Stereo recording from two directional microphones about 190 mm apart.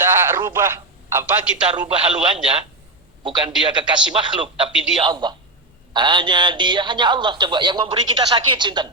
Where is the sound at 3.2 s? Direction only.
25° right (ahead or behind).